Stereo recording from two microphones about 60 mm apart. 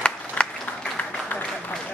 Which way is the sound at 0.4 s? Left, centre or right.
Left.